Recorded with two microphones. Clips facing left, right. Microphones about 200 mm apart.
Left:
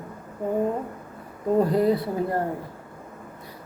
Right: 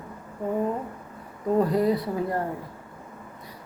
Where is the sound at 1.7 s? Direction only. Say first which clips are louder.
Left 2 dB; 25° left (ahead or behind).